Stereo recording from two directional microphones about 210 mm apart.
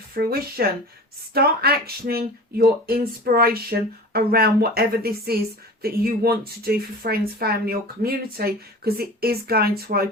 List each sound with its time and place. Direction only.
0.1 s speech: 45° right (ahead or behind)